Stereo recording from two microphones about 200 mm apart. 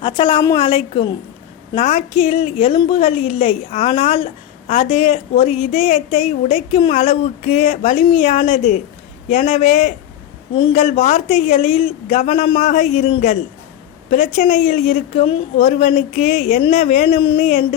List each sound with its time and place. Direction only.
0.0 s a woman's voice: 25° left (ahead or behind)